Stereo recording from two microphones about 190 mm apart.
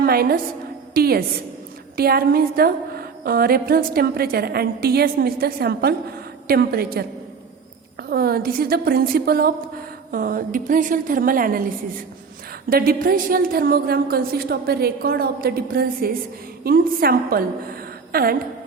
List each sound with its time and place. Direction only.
0.0 s a woman's voice: 55° right (ahead or behind)
8.1 s a woman's voice: 55° right (ahead or behind)
18.1 s a sound: 50° right (ahead or behind)